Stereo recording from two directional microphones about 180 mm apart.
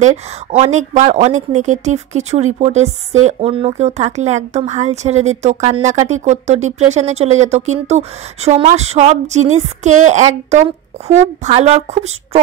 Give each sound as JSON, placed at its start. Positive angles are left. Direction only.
{"t": 0.0, "sound": "speech", "side_deg": -40}